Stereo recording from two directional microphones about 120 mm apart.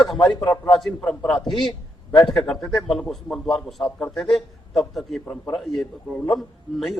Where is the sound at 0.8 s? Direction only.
5° left (ahead or behind).